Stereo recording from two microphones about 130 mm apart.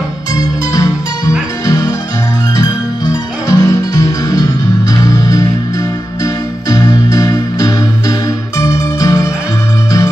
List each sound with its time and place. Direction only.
2.5 s music: 25° left (ahead or behind)
6.7 s music: 25° left (ahead or behind)